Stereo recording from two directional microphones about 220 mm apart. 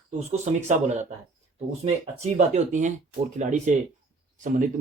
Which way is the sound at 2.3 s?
35° right (ahead or behind).